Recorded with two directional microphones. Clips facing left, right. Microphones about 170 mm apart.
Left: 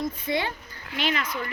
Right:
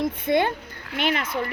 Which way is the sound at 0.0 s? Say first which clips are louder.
Right 6 dB; 55° right (ahead or behind).